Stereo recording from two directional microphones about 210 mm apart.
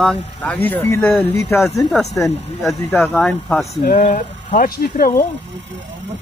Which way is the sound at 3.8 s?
35° left (ahead or behind).